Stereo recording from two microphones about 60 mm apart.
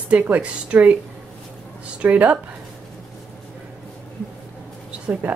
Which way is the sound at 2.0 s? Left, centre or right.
Right.